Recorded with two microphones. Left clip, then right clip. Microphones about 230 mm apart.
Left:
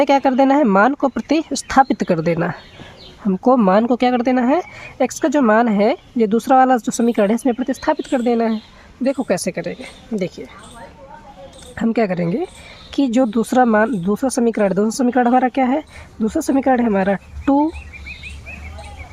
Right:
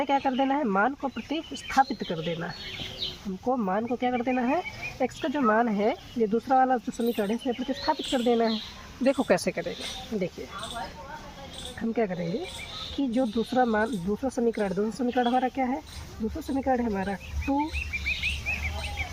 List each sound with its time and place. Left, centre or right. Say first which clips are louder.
0.0 s speech: left 12 dB; left
9.0 s speech: left 5 dB; left
11.8 s speech: left 10 dB; left